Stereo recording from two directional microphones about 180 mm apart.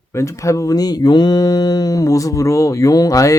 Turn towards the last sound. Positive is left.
turn(degrees=20)  # may be behind; listen again after turning